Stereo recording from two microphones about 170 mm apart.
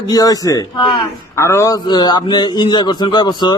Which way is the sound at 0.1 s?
20° left (ahead or behind).